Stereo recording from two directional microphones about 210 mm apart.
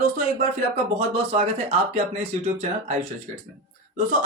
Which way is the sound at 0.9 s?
30° right (ahead or behind).